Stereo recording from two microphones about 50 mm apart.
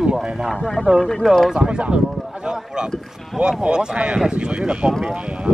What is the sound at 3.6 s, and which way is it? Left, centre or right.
Speech, centre.